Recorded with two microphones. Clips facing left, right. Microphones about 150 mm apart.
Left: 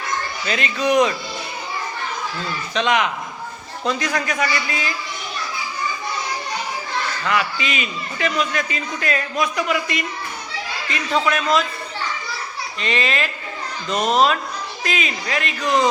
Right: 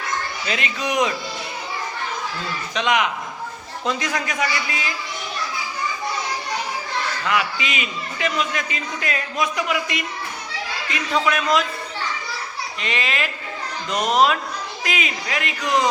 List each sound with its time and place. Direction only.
0.4 s a man's voice: 20° right (ahead or behind)
2.7 s a man's voice: 15° right (ahead or behind)
7.3 s a man's voice: 15° right (ahead or behind)
11.3 s a man's voice: 10° right (ahead or behind)
12.8 s a man's voice: 10° right (ahead or behind)